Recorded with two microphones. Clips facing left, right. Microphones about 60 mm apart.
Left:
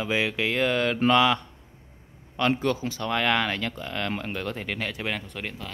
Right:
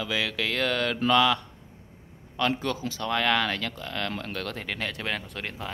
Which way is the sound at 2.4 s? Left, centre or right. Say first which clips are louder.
Left 3 dB; left.